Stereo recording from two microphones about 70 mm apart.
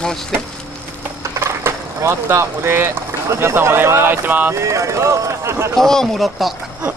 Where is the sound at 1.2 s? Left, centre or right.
Right.